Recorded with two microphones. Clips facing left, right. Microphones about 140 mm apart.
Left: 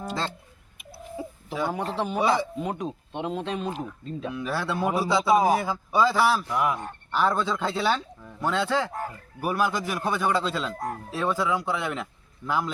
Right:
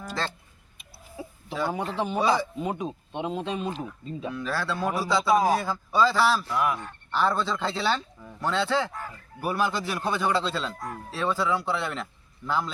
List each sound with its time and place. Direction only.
0.0 s speech: 20° left (ahead or behind)
1.1 s chicken: centre (ahead or behind)
2.0 s speech: centre (ahead or behind)
4.4 s a man's voice: 20° left (ahead or behind)
5.5 s speech: 5° left (ahead or behind)
5.9 s a man's voice: 15° left (ahead or behind)
8.9 s speech: 45° left (ahead or behind)
9.4 s a man's voice: 5° left (ahead or behind)
10.8 s speech: 40° left (ahead or behind)
11.1 s a man's voice: 10° left (ahead or behind)